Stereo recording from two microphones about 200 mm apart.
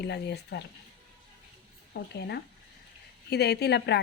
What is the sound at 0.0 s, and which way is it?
Speech, 55° left (ahead or behind).